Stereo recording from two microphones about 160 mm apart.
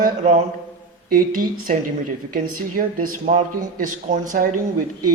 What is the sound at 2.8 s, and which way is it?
A man's voice, 60° right (ahead or behind).